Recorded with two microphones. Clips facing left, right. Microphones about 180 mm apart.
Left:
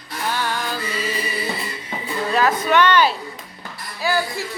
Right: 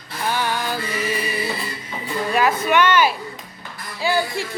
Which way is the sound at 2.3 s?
10° right (ahead or behind).